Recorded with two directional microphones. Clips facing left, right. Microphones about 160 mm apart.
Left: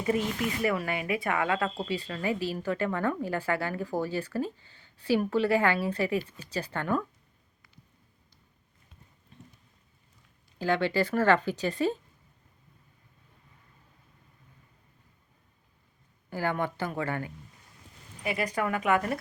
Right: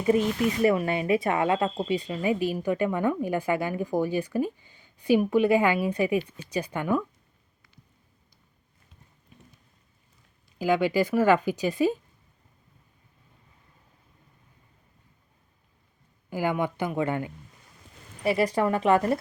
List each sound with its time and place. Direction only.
0.0 s speech: 25° right (ahead or behind)
10.6 s speech: 10° right (ahead or behind)
16.3 s speech: 15° right (ahead or behind)
18.2 s a woman's voice: 35° right (ahead or behind)